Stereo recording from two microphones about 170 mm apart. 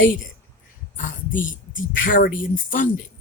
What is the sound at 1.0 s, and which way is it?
A woman's voice, 50° left (ahead or behind).